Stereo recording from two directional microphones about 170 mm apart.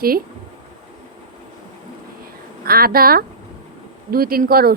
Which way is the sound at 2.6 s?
60° right (ahead or behind).